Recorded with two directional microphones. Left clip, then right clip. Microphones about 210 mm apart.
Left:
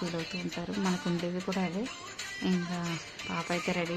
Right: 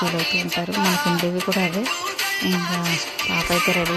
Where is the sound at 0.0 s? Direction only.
55° right (ahead or behind).